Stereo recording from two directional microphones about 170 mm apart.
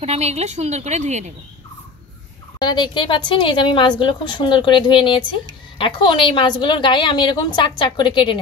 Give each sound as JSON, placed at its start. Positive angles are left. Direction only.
{"t": 0.0, "sound": "a woman's voice", "side_deg": -40}
{"t": 2.6, "sound": "a woman's voice", "side_deg": 25}